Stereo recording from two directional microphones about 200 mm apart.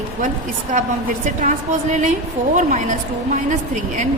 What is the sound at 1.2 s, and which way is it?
A woman's voice, 40° right (ahead or behind).